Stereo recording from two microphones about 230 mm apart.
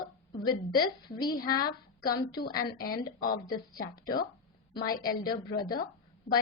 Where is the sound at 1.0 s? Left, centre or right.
Centre.